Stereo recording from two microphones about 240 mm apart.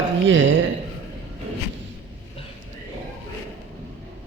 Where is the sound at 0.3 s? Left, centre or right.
Right.